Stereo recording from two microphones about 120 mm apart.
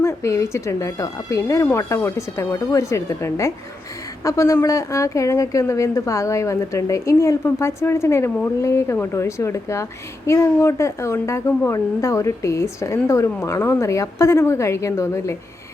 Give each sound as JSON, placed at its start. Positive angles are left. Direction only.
{"t": 0.0, "sound": "a woman's voice", "side_deg": 25}